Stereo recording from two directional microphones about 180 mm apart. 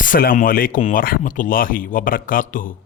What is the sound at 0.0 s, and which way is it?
Speech, 50° left (ahead or behind).